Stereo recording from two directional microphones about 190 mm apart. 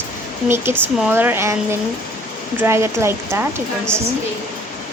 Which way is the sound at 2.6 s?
15° right (ahead or behind).